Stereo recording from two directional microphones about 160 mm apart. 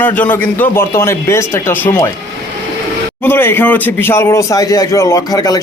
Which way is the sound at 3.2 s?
15° left (ahead or behind).